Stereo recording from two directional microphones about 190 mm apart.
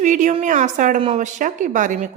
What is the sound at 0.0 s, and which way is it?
A woman's voice, 40° right (ahead or behind).